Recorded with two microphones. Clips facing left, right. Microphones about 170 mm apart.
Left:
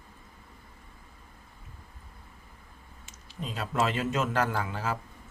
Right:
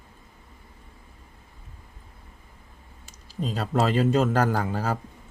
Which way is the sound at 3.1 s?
35° right (ahead or behind).